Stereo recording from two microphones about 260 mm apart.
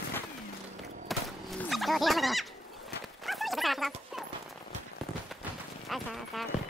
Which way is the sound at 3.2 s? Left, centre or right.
Centre.